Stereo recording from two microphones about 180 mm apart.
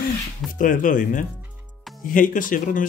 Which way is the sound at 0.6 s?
45° left (ahead or behind).